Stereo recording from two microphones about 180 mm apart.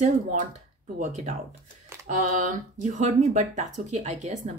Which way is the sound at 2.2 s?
45° right (ahead or behind).